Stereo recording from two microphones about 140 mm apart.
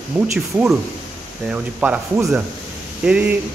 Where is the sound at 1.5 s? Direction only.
10° right (ahead or behind).